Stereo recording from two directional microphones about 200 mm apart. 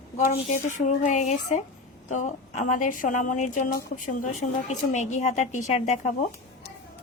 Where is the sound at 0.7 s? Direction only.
40° left (ahead or behind).